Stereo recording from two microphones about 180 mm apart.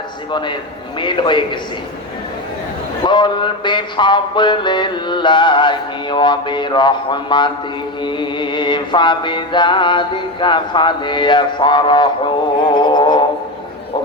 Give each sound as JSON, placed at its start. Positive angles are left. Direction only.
{"t": 0.3, "sound": "music", "side_deg": 25}
{"t": 3.0, "sound": "music", "side_deg": 25}